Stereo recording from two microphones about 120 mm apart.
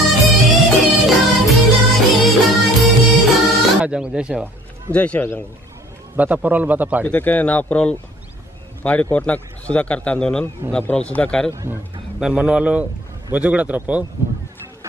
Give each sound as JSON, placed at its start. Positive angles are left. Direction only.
{"t": 0.0, "sound": "music", "side_deg": 0}
{"t": 4.9, "sound": "a man's voice", "side_deg": 10}
{"t": 6.1, "sound": "a man's voice", "side_deg": -15}
{"t": 7.1, "sound": "a man's voice", "side_deg": 15}
{"t": 11.5, "sound": "a man's voice", "side_deg": -20}
{"t": 12.2, "sound": "a man's voice", "side_deg": -10}